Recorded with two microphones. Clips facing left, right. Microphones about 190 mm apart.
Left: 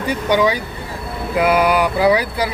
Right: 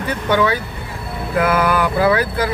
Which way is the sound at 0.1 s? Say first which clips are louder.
Left 1 dB; 15° left (ahead or behind).